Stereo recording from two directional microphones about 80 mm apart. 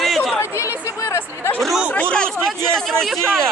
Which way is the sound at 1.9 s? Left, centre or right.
Centre.